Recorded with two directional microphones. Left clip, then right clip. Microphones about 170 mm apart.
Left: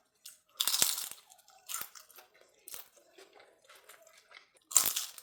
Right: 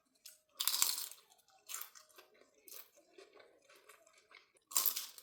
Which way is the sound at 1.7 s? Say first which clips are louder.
Left 6 dB; 30° left (ahead or behind).